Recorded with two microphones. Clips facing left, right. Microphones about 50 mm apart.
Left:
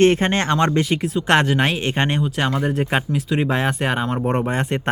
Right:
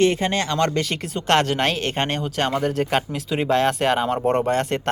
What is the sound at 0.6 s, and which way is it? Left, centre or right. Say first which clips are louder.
Speech: left 3 dB; centre.